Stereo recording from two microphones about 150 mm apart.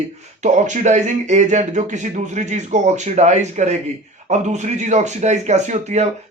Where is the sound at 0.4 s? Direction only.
55° right (ahead or behind).